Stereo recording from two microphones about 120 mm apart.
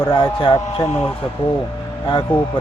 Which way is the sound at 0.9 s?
55° left (ahead or behind).